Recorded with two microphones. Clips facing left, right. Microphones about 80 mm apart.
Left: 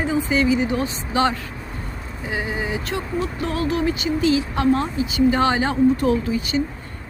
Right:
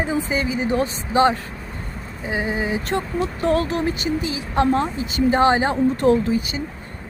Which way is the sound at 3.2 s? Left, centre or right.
Right.